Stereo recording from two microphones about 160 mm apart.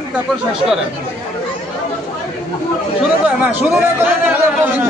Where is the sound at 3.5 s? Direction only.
10° right (ahead or behind).